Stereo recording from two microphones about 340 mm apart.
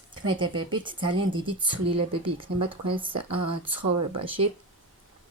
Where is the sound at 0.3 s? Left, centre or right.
Centre.